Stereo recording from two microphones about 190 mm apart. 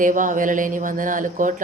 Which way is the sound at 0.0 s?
45° right (ahead or behind).